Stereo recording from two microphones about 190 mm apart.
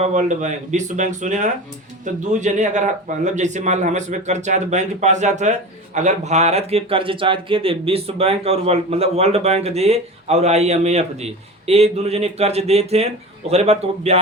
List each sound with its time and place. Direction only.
0.0 s speech: 40° right (ahead or behind)